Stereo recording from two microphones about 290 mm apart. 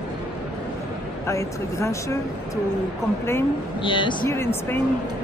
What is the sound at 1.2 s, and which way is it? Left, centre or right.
Speech, centre.